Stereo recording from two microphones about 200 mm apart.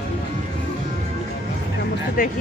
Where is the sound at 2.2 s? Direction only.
45° left (ahead or behind).